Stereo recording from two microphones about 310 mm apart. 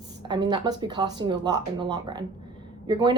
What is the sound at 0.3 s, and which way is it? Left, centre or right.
Speech, centre.